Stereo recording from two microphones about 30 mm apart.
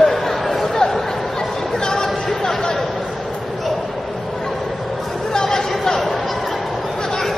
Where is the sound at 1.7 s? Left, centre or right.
Left.